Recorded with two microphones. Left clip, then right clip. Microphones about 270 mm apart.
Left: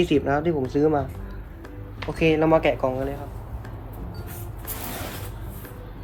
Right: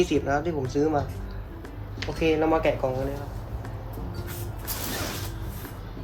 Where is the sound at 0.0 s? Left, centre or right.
Left.